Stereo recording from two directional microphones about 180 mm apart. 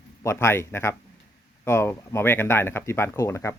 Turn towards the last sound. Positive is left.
turn(degrees=15)  # may be behind; listen again after turning